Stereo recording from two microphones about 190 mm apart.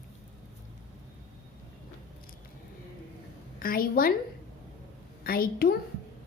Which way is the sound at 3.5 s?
50° left (ahead or behind).